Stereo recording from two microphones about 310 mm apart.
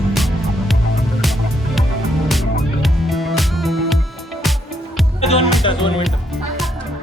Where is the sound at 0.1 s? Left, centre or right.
Centre.